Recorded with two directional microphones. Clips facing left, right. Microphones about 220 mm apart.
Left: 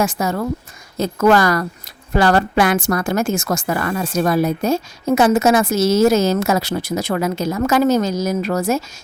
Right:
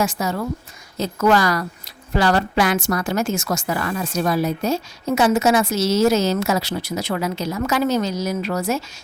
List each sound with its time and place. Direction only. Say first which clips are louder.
0.0 s a woman's voice: left 3 dB; 50° left (ahead or behind)